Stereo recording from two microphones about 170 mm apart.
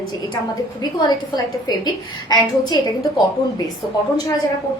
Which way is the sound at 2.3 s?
25° left (ahead or behind).